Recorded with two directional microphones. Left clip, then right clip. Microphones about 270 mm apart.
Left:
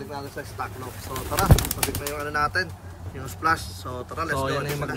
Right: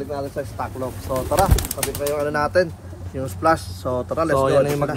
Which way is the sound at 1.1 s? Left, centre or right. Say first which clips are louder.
Right 5 dB; centre.